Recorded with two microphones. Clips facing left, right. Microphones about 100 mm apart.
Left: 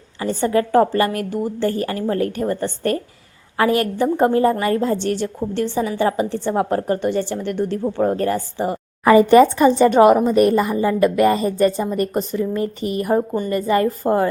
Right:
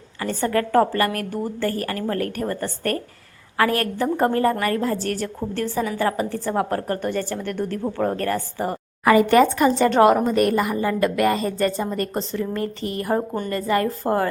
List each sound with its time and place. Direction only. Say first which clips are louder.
0.2 s a woman's voice: left 4 dB; 15° left (ahead or behind)
13.1 s a woman's voice: left 4 dB; 5° left (ahead or behind)
13.5 s speech: left 3 dB; 20° left (ahead or behind)